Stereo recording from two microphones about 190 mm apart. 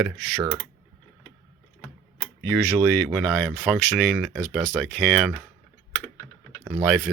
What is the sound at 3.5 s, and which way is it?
Speech, 5° right (ahead or behind).